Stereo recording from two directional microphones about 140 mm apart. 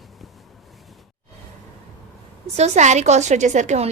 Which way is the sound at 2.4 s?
50° right (ahead or behind).